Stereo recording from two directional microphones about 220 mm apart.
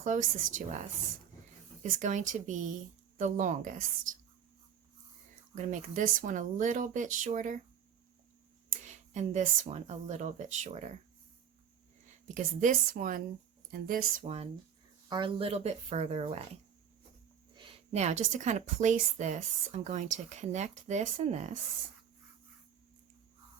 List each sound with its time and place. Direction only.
0.0 s a woman's voice: 35° right (ahead or behind)
5.5 s a woman's voice: 35° right (ahead or behind)
8.8 s a woman's voice: 35° right (ahead or behind)
12.3 s a woman's voice: 35° right (ahead or behind)
17.5 s a woman's voice: 25° right (ahead or behind)